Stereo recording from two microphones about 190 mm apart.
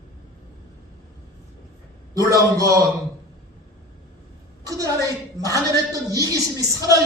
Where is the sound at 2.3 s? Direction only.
20° right (ahead or behind).